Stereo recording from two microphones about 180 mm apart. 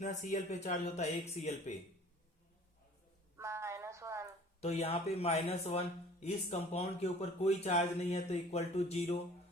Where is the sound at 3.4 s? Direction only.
15° right (ahead or behind).